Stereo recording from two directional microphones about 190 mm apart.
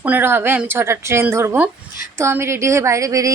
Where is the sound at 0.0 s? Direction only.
10° right (ahead or behind).